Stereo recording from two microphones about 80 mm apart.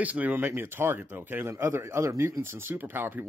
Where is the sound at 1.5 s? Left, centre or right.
Right.